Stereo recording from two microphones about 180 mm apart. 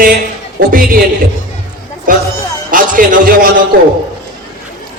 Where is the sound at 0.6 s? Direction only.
55° right (ahead or behind).